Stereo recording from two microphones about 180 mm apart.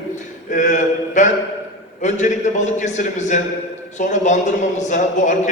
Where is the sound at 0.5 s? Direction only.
45° left (ahead or behind).